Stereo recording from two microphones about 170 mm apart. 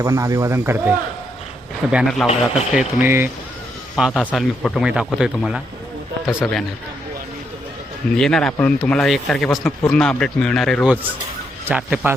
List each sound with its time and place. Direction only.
0.0 s speech: 20° right (ahead or behind); by 6.7 s centre (ahead or behind)
8.1 s speech: 5° left (ahead or behind)